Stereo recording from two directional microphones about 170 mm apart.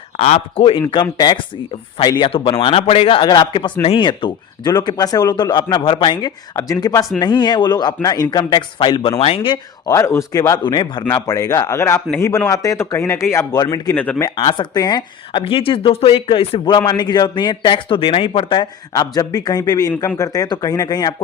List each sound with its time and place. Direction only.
0.2 s a man's voice: 40° left (ahead or behind)
9.8 s speech: 15° left (ahead or behind)
13.9 s speech: 10° left (ahead or behind)
14.3 s speech: 25° left (ahead or behind)